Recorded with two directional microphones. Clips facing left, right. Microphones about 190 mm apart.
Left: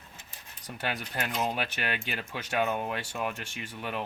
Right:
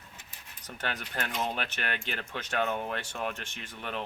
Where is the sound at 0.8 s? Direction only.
10° left (ahead or behind).